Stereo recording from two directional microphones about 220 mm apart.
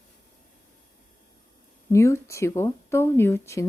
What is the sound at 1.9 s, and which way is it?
Speech, 15° left (ahead or behind).